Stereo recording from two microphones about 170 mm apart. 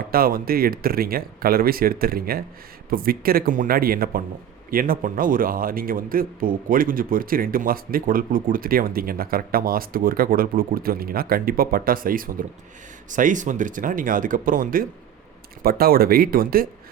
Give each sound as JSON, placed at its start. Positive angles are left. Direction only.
{"t": 0.1, "sound": "a man's voice", "side_deg": -60}